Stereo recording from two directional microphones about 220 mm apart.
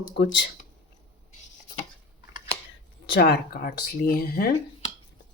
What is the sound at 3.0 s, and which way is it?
Speech, 50° left (ahead or behind).